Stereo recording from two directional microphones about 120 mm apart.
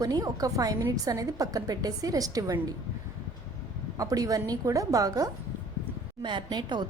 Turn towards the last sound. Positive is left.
turn(degrees=-35)  # may be behind; listen again after turning